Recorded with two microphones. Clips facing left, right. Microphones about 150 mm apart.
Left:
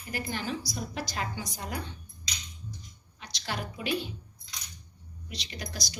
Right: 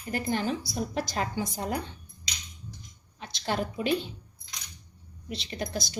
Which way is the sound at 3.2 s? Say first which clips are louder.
Right 6 dB; 25° right (ahead or behind).